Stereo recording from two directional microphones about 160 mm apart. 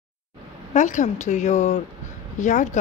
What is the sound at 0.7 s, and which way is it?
Speech, 50° left (ahead or behind).